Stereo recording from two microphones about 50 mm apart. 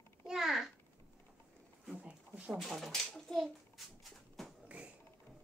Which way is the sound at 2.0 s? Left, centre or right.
Right.